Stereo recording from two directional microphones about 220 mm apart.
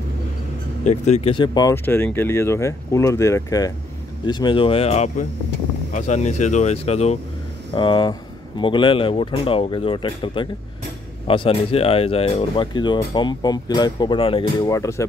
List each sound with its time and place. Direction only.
0.8 s speech: 30° left (ahead or behind); by 15.0 s 15° left (ahead or behind)